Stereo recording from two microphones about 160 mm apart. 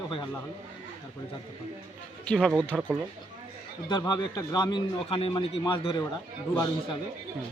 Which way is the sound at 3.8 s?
25° left (ahead or behind).